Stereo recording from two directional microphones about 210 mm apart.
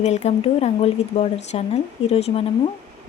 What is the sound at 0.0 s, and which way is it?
Speech, 30° left (ahead or behind).